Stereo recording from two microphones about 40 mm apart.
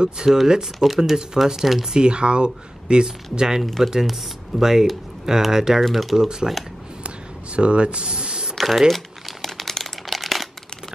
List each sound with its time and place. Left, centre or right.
0.0 s speech: centre
0.7 s speech: centre
2.0 s speech: right
3.6 s speech: centre
6.1 s speech: centre
7.5 s speech: right
8.5 s crumpling: centre